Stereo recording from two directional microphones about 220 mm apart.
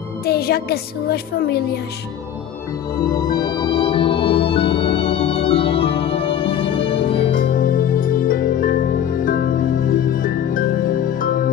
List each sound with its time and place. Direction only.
0.2 s speech: 45° left (ahead or behind)
3.1 s speech: 45° left (ahead or behind)
3.5 s music: 20° left (ahead or behind)
7.3 s music: 40° left (ahead or behind)